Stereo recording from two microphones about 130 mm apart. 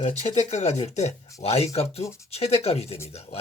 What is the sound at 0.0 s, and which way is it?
Speech, 60° left (ahead or behind).